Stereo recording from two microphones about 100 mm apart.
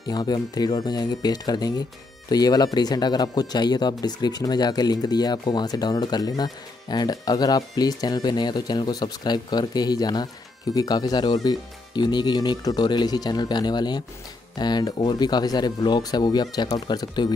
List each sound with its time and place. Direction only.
0.0 s speech: 40° left (ahead or behind)